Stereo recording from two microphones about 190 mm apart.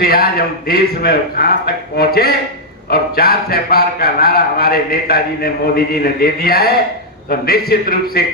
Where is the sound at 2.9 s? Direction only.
55° left (ahead or behind).